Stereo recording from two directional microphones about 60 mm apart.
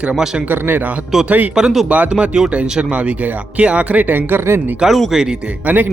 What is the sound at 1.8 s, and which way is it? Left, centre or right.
Speech, right.